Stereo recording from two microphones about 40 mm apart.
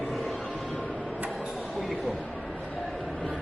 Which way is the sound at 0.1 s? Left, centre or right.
Centre.